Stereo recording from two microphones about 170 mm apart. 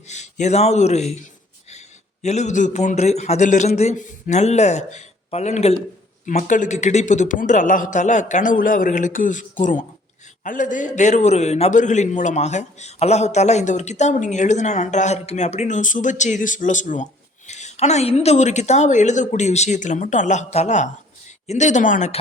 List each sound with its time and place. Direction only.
0.1 s a man's voice: 40° left (ahead or behind)
2.2 s a man's voice: 40° left (ahead or behind)